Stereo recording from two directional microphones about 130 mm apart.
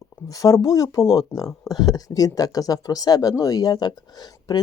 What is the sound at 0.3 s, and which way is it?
Speech, 25° left (ahead or behind).